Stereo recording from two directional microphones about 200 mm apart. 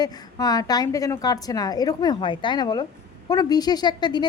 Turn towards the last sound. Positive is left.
turn(degrees=20)  # may be behind; listen again after turning